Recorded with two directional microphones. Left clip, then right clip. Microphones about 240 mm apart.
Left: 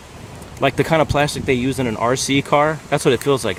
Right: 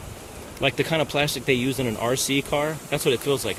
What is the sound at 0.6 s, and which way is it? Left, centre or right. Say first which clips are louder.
Speech: left 7 dB; centre.